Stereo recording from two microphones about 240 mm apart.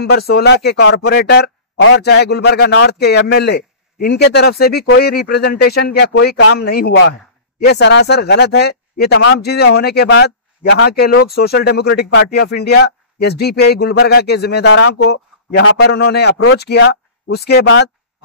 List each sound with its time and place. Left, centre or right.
0.0 s speech: left